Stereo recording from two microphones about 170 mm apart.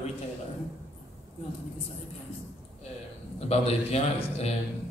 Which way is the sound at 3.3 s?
35° left (ahead or behind).